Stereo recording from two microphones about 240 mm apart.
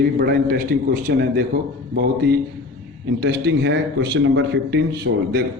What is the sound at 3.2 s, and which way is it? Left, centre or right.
A man's voice, right.